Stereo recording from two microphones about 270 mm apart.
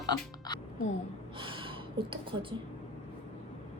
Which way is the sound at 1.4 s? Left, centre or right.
Centre.